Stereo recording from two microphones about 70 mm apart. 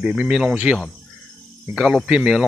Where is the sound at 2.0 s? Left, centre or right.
Centre.